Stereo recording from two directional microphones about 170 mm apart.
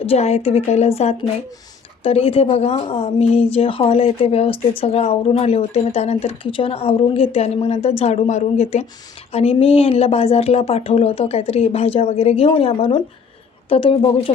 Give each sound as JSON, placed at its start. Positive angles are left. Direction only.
{"t": 0.0, "sound": "speech", "side_deg": 35}